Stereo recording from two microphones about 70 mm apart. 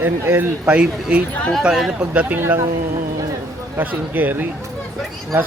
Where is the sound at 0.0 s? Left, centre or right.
Right.